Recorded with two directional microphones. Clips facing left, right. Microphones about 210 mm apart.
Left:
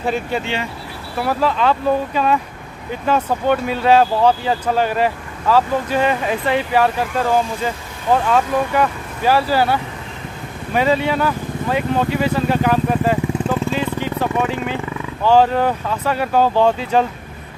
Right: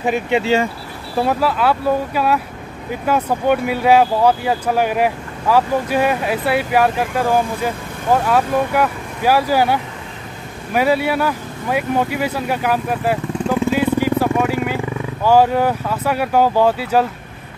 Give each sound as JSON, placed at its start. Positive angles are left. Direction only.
{"t": 0.0, "sound": "speech", "side_deg": -15}
{"t": 0.4, "sound": "speech", "side_deg": -40}
{"t": 1.4, "sound": "speech", "side_deg": -10}